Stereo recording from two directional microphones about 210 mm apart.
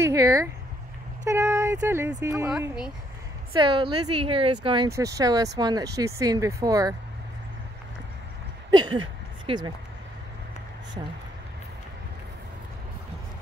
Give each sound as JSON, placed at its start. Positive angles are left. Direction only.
{"t": 0.0, "sound": "speech", "side_deg": -15}
{"t": 2.5, "sound": "speech", "side_deg": -5}
{"t": 3.5, "sound": "speech", "side_deg": -25}
{"t": 8.6, "sound": "a sound", "side_deg": -20}